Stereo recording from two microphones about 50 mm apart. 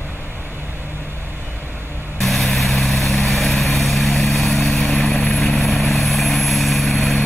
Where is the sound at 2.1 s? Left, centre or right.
Centre.